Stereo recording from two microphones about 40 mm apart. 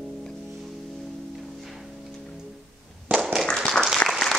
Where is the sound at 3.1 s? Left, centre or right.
Centre.